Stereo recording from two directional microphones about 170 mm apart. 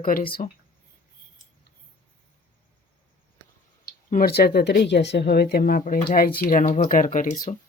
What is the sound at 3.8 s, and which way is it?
Speech, 60° left (ahead or behind).